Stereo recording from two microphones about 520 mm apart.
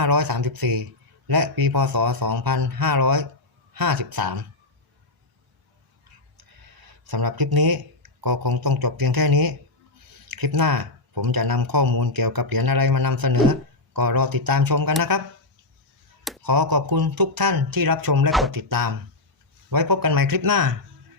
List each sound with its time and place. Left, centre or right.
0.0 s a man's voice: right
6.8 s speech: right
16.4 s a man's voice: right
18.3 s speech: centre
18.5 s speech: right